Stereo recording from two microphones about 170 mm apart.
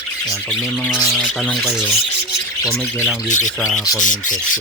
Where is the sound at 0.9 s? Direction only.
5° left (ahead or behind).